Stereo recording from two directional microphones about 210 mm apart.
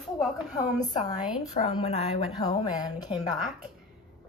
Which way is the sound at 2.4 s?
20° left (ahead or behind).